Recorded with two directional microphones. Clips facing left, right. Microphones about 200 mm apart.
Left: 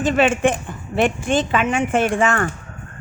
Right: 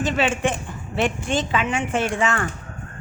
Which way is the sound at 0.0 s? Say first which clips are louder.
Left 5 dB; 50° left (ahead or behind).